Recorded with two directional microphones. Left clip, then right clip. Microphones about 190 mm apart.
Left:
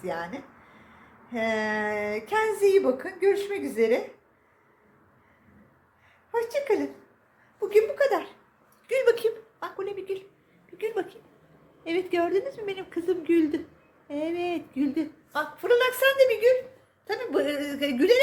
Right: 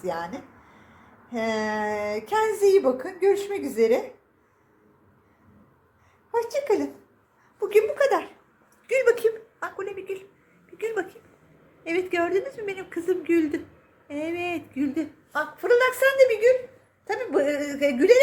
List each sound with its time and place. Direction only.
0.0 s speech: 10° right (ahead or behind)
6.3 s speech: 10° right (ahead or behind)
8.9 s a woman's voice: 10° right (ahead or behind)